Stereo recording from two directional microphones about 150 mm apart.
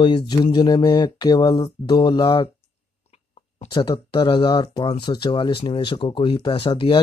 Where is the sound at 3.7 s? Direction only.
30° left (ahead or behind).